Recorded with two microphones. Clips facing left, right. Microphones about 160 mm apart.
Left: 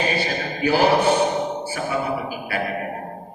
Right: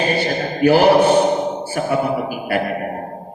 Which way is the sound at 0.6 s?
65° right (ahead or behind).